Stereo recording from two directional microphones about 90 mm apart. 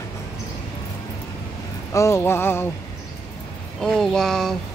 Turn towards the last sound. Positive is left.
turn(degrees=5)  # may be behind; listen again after turning